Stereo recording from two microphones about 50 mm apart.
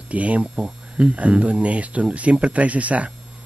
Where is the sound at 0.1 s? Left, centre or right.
Right.